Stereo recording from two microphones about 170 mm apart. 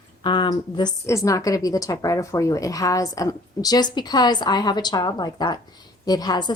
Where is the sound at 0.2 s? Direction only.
25° left (ahead or behind).